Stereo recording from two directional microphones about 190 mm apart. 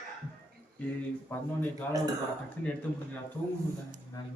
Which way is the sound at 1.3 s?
10° left (ahead or behind).